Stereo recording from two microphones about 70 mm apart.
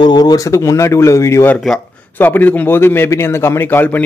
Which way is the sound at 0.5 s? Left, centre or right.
Left.